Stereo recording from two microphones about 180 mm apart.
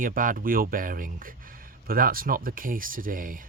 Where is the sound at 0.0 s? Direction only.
50° right (ahead or behind).